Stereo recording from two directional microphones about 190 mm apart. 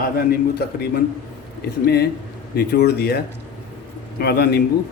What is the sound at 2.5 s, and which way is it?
Speech, 60° left (ahead or behind).